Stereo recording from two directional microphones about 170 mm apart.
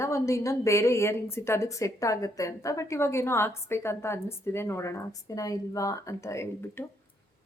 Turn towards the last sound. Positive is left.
turn(degrees=15)  # may be behind; listen again after turning